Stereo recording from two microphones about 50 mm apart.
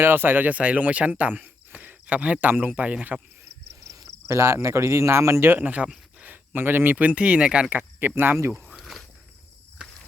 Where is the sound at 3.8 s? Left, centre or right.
Right.